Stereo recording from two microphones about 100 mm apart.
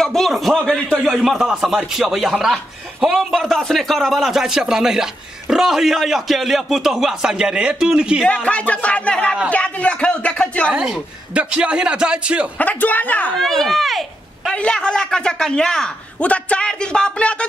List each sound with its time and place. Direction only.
0.0 s speech: 5° left (ahead or behind)
1.0 s speech: 5° right (ahead or behind)
8.3 s a man's voice: 10° left (ahead or behind)
10.7 s a man's voice: 10° right (ahead or behind)
12.5 s a man's voice: 15° left (ahead or behind)
13.4 s a man's voice: 5° left (ahead or behind)